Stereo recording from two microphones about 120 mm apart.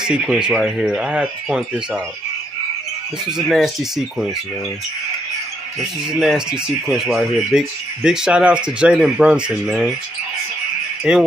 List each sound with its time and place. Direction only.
0.0 s speech: 5° right (ahead or behind)
3.3 s speech: centre (ahead or behind)
5.8 s speech: centre (ahead or behind)
11.1 s speech: 5° right (ahead or behind)